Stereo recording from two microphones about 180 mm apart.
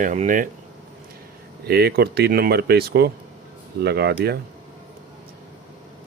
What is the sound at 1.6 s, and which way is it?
Speech, 60° right (ahead or behind).